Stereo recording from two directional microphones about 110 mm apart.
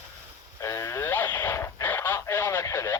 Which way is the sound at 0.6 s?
30° left (ahead or behind).